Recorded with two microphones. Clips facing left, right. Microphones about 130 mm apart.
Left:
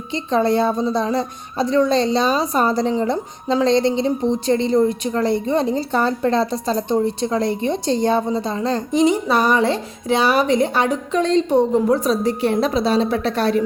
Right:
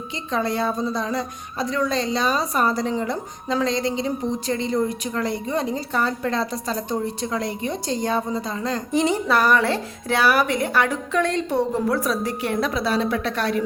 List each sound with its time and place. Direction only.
0.1 s a woman's voice: 25° left (ahead or behind)